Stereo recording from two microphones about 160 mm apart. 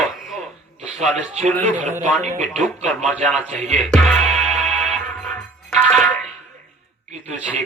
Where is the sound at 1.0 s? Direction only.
45° right (ahead or behind).